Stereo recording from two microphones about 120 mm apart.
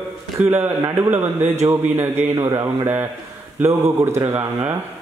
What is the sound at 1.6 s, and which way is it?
A man's voice, 30° right (ahead or behind).